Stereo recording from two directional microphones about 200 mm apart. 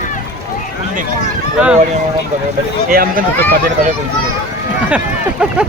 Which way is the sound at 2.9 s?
45° right (ahead or behind).